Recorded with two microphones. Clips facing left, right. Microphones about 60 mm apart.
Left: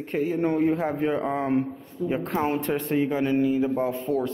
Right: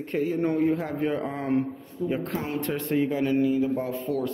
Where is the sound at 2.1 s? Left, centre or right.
Left.